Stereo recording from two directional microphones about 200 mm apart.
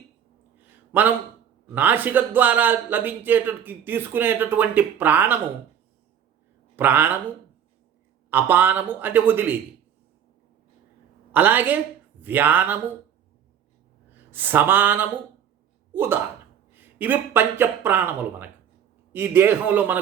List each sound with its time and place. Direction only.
0.6 s a sound: 10° right (ahead or behind)
1.7 s a man's voice: 10° right (ahead or behind)
6.7 s a man's voice: 10° right (ahead or behind)
8.3 s a man's voice: 10° right (ahead or behind)
11.3 s a man's voice: 10° right (ahead or behind)
14.3 s a man's voice: 10° right (ahead or behind)